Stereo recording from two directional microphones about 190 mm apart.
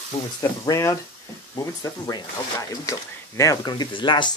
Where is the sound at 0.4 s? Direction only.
15° left (ahead or behind).